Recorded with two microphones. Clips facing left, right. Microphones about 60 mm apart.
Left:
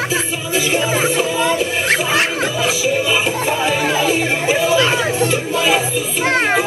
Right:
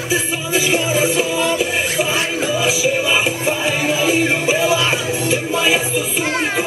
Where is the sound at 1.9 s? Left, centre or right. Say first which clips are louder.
Left 2 dB; left.